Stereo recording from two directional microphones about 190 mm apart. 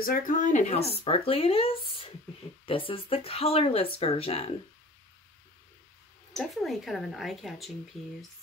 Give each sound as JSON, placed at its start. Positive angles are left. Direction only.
{"t": 0.0, "sound": "speech", "side_deg": 45}
{"t": 6.3, "sound": "speech", "side_deg": 0}